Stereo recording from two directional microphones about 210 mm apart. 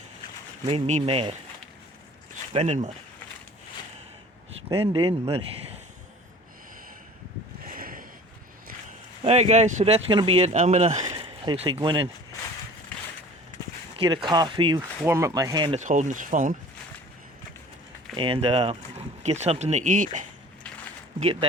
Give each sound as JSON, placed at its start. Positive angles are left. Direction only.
{"t": 0.6, "sound": "speech", "side_deg": -30}
{"t": 4.7, "sound": "speech", "side_deg": -25}
{"t": 7.7, "sound": "a sound", "side_deg": -40}
{"t": 9.2, "sound": "speech", "side_deg": -30}
{"t": 13.9, "sound": "speech", "side_deg": -25}
{"t": 15.8, "sound": "speech", "side_deg": -35}
{"t": 18.2, "sound": "speech", "side_deg": -25}